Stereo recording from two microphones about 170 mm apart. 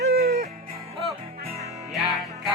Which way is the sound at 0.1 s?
70° right (ahead or behind).